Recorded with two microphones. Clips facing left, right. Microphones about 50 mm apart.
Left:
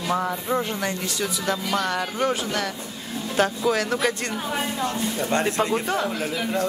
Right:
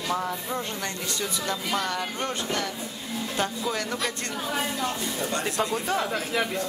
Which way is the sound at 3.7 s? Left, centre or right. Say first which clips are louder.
Left 7 dB; left.